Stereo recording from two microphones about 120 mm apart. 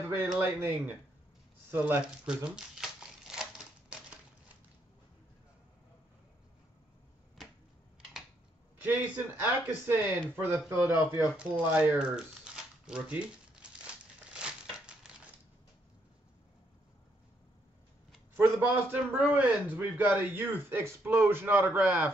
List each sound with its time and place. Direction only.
0.0 s speech: 20° right (ahead or behind)
1.7 s crumpling: 15° right (ahead or behind)
8.7 s speech: 15° right (ahead or behind)
12.8 s crumpling: 10° right (ahead or behind)
18.3 s speech: 20° right (ahead or behind)